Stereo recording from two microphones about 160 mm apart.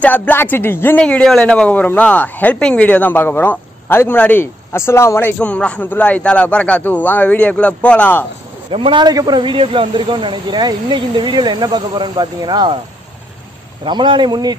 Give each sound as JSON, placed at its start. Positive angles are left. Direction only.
{"t": 0.0, "sound": "a man's voice", "side_deg": 10}
{"t": 8.7, "sound": "speech", "side_deg": -30}
{"t": 13.8, "sound": "speech", "side_deg": -30}